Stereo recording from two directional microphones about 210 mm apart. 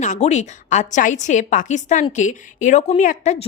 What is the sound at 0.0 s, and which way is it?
A woman's voice, 35° left (ahead or behind).